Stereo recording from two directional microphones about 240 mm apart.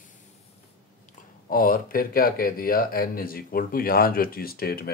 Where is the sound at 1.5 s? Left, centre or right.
Left.